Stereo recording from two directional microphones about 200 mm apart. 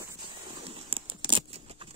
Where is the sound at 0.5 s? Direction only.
25° right (ahead or behind).